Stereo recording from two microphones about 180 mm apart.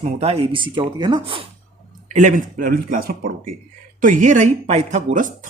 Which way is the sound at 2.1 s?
45° right (ahead or behind).